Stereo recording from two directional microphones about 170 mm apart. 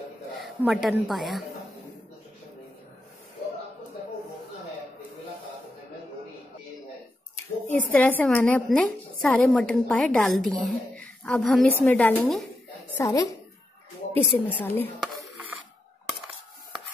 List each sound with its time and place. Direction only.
0.4 s a woman's voice: centre (ahead or behind)
7.3 s speech: 10° left (ahead or behind)
12.9 s a woman's voice: 20° left (ahead or behind)